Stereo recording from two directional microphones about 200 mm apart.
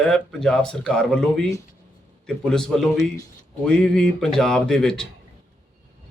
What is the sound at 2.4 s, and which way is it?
A man's voice, centre (ahead or behind).